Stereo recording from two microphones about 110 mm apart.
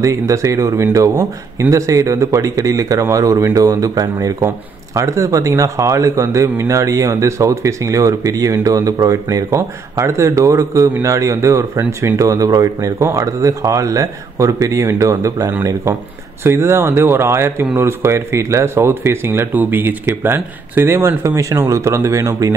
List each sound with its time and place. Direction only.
0.0 s speech: 30° right (ahead or behind)